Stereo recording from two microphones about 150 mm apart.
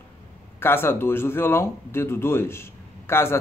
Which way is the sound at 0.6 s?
15° left (ahead or behind).